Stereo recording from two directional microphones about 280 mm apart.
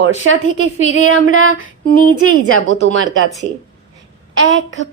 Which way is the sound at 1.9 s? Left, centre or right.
Left.